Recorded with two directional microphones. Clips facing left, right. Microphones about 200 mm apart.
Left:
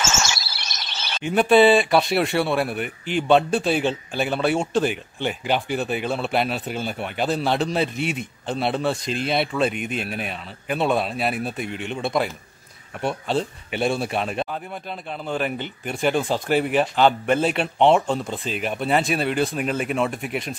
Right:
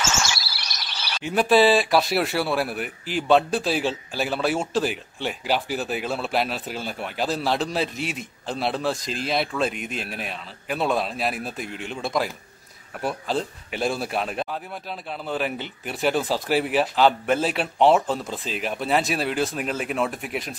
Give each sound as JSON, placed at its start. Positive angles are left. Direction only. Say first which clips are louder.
{"t": 0.0, "sound": "chirp", "louder": "left 1 dB", "side_deg": 25}
{"t": 1.2, "sound": "speech", "louder": "left 3 dB", "side_deg": 0}